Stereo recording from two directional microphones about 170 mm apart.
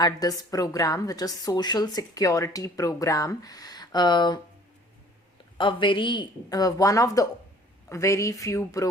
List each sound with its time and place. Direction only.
0.0 s a woman's voice: 20° left (ahead or behind)
5.5 s a woman's voice: 30° left (ahead or behind)